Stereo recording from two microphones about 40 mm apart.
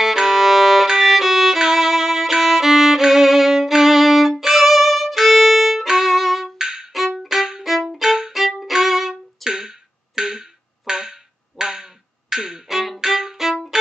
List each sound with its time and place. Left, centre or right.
0.0 s violin: centre
6.1 s music: centre
6.6 s music: centre
7.2 s violin: centre
7.6 s violin: centre
9.4 s wood block: centre
12.6 s music: centre
13.0 s violin: centre